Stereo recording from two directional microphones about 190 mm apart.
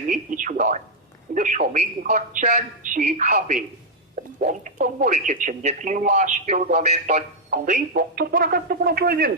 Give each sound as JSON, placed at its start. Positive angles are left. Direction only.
{"t": 0.1, "sound": "speech", "side_deg": -45}